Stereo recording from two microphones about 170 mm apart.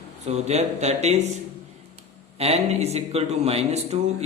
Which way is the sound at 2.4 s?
40° right (ahead or behind).